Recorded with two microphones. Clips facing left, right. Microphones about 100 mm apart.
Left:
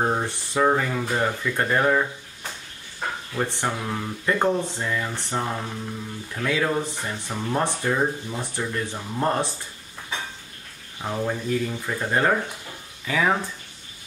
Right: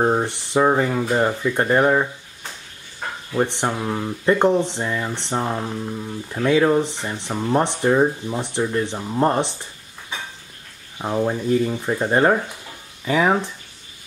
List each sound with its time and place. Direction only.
0.0 s speech: 20° right (ahead or behind)
3.3 s speech: 20° right (ahead or behind)
11.0 s speech: 25° right (ahead or behind)